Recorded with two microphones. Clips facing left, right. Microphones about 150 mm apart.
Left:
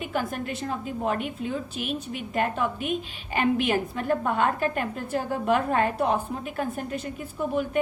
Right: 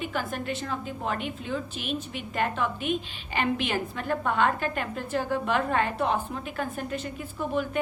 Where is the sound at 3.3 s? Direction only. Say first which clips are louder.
Left 4 dB; 45° left (ahead or behind).